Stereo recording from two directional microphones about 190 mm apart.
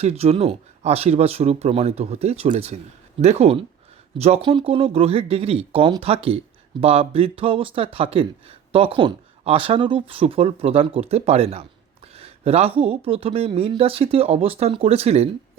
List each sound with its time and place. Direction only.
0.0 s speech: 35° right (ahead or behind)